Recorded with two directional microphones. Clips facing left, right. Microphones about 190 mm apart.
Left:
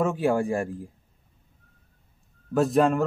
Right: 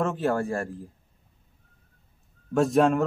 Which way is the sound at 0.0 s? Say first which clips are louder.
Left 2 dB; 10° left (ahead or behind).